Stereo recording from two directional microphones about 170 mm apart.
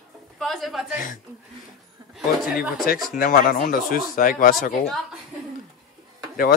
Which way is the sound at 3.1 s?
55° left (ahead or behind).